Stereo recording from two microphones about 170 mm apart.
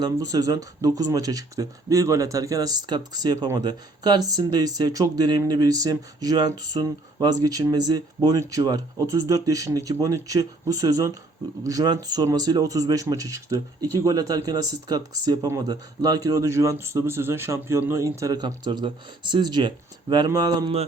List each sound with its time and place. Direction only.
0.0 s speech: 20° right (ahead or behind)